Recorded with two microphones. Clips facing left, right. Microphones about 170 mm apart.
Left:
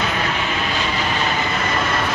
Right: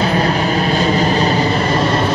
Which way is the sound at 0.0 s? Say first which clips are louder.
Right 8 dB; 35° right (ahead or behind).